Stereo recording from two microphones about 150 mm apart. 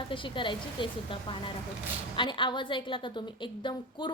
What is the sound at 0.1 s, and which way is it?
A woman's voice, 35° left (ahead or behind).